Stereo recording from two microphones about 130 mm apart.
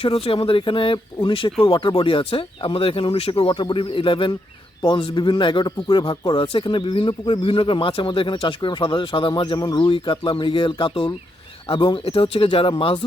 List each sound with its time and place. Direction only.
0.0 s speech: 45° left (ahead or behind)